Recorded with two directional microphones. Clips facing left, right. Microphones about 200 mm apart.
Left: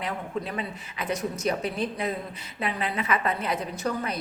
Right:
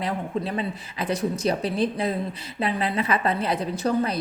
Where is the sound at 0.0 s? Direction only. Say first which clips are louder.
Right 4 dB; 35° right (ahead or behind).